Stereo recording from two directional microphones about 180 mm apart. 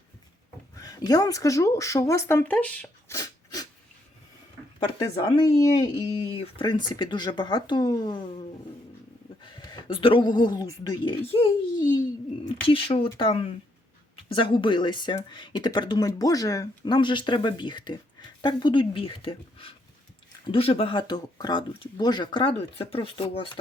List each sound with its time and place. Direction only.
0.8 s speech: 20° left (ahead or behind)
3.2 s a sound: 20° left (ahead or behind)
5.2 s speech: 20° left (ahead or behind)